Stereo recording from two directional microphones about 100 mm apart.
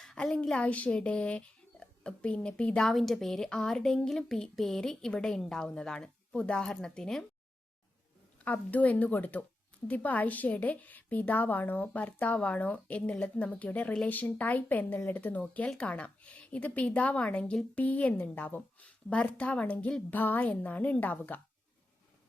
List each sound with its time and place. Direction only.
0.0 s speech: 5° left (ahead or behind)
8.4 s speech: 15° left (ahead or behind)